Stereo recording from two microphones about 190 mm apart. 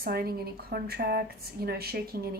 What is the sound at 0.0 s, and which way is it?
A woman's voice, 55° right (ahead or behind).